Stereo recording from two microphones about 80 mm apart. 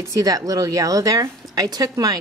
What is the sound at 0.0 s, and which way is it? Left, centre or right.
A woman's voice, right.